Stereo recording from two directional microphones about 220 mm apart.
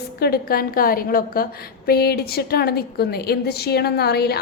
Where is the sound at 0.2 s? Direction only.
45° left (ahead or behind).